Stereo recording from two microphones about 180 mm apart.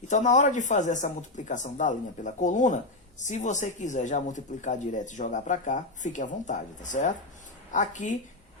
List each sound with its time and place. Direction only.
0.1 s speech: 45° left (ahead or behind)